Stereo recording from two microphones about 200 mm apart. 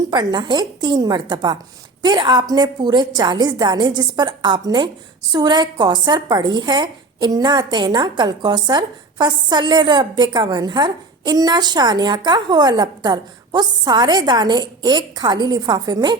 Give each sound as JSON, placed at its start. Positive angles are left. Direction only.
{"t": 0.1, "sound": "speech", "side_deg": -20}